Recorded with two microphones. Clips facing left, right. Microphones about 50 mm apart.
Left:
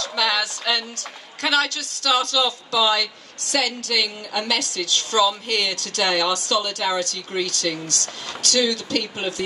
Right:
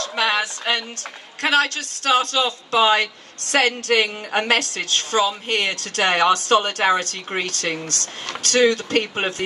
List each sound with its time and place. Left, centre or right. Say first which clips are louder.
0.0 s a woman's voice: right 2 dB; right